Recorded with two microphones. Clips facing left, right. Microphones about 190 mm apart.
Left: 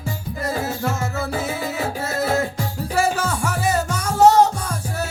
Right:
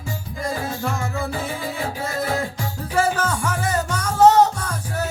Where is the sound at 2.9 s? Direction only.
10° left (ahead or behind).